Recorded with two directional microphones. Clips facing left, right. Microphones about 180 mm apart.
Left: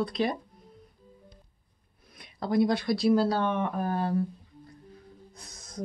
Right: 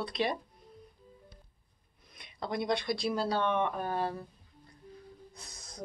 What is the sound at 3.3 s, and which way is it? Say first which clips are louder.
Speech: left 3 dB; 45° left (ahead or behind).